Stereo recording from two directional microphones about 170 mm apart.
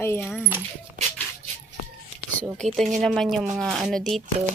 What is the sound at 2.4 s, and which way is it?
A woman's voice, 5° left (ahead or behind).